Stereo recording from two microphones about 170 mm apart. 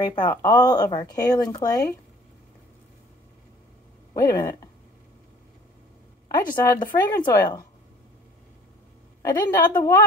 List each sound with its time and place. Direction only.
0.0 s speech: 25° left (ahead or behind)
4.1 s speech: 20° left (ahead or behind)
6.3 s speech: 20° left (ahead or behind)
9.2 s speech: 20° left (ahead or behind)